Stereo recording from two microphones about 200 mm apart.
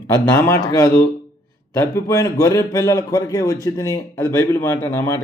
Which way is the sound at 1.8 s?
15° left (ahead or behind).